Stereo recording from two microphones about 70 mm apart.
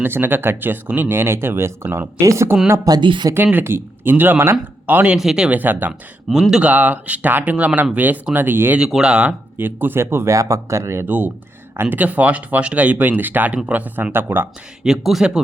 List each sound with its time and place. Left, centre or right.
0.0 s speech: right
2.8 s speech: right
3.3 s speech: right
5.1 s speech: centre
5.5 s speech: right
8.9 s speech: centre
9.6 s speech: right
10.3 s speech: right
14.8 s speech: centre